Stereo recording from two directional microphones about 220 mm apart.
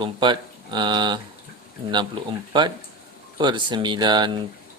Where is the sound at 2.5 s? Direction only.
20° right (ahead or behind).